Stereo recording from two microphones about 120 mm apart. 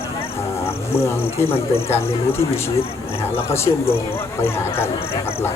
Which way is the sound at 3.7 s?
35° left (ahead or behind).